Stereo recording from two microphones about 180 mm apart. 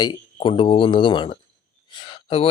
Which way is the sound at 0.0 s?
25° left (ahead or behind).